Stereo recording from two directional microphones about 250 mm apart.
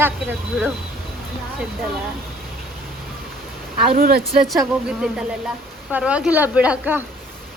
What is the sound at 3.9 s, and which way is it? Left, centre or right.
Speech, right.